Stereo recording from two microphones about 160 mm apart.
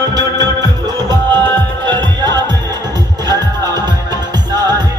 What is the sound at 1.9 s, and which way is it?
Music, 30° right (ahead or behind).